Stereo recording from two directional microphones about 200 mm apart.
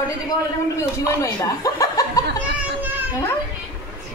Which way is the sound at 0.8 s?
15° left (ahead or behind).